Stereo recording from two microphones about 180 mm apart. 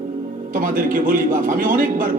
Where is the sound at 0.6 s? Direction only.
50° right (ahead or behind).